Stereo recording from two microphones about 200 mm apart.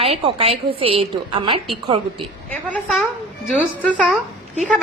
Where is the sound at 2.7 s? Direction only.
Centre (ahead or behind).